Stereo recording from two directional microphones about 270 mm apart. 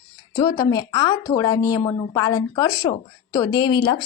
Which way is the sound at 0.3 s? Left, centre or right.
Centre.